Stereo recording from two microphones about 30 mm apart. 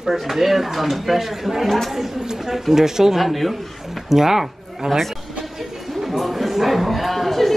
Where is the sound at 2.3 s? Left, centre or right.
Centre.